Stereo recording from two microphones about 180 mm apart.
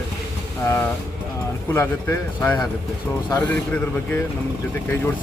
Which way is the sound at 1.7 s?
15° left (ahead or behind).